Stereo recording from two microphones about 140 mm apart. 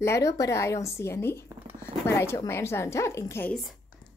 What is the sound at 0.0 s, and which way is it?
A woman's voice, 20° left (ahead or behind).